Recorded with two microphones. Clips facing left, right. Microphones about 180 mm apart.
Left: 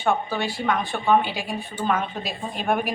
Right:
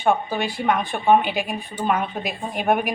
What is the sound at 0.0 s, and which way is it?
A man's voice, 15° right (ahead or behind).